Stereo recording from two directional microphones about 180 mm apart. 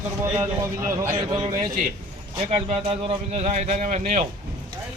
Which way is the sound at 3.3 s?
40° right (ahead or behind).